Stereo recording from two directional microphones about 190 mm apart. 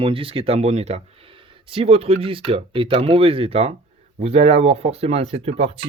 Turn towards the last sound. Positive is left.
turn(degrees=-30)  # may be behind; listen again after turning